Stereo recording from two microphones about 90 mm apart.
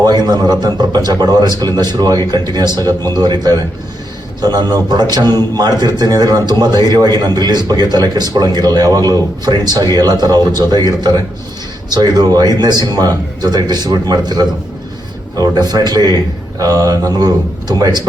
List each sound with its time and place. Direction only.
0.0 s a man's voice: 50° right (ahead or behind)